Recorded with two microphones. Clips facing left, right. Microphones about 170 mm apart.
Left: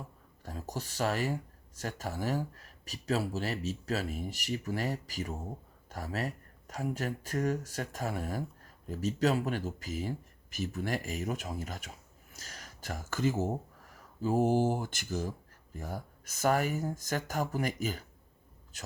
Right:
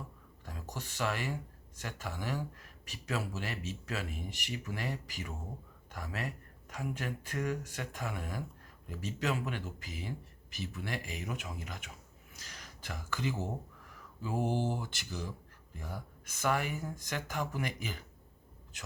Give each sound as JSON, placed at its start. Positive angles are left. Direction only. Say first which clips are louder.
{"t": 0.4, "sound": "speech", "louder": "left 5 dB", "side_deg": 35}